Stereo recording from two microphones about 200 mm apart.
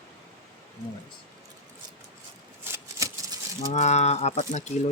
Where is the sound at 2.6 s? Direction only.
15° right (ahead or behind).